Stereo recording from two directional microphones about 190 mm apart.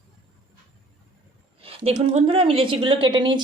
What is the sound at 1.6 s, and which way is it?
A woman's voice, 35° right (ahead or behind).